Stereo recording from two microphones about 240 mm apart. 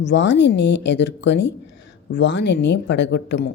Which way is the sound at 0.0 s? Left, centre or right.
Left.